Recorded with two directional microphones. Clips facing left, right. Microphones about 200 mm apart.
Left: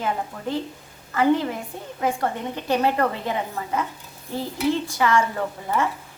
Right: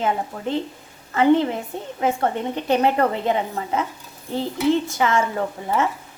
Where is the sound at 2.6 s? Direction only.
20° right (ahead or behind).